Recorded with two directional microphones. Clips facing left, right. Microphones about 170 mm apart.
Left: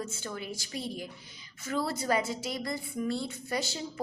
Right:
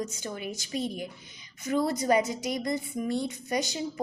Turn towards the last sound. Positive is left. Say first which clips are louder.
# right 4 dB
turn(degrees=-15)  # may be behind; listen again after turning